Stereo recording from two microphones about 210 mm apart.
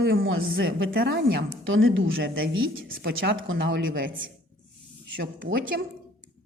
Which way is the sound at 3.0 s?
55° right (ahead or behind).